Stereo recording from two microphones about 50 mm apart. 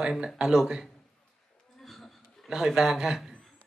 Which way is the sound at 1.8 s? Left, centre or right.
Centre.